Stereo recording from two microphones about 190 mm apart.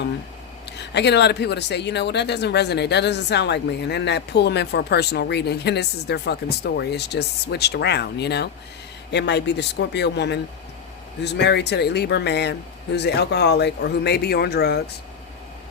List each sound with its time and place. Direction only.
0.6 s speech: 65° left (ahead or behind)